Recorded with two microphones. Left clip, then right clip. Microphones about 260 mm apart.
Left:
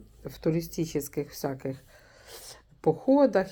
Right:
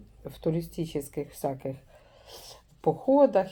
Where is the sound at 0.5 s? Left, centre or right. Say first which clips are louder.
Left 2 dB; centre.